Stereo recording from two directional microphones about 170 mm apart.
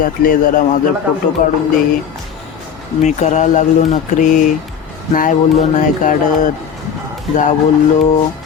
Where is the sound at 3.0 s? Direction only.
45° left (ahead or behind).